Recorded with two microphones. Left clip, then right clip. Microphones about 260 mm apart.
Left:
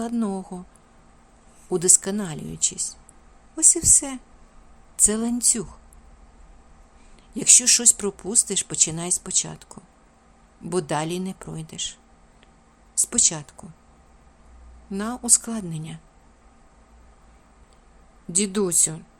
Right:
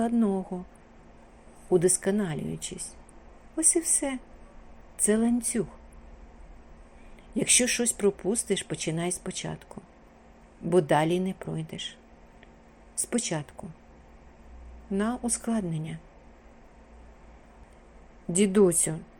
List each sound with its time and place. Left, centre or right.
0.1 s speech: centre
1.7 s speech: centre
7.3 s speech: centre
13.0 s speech: centre
14.9 s speech: centre
18.3 s speech: centre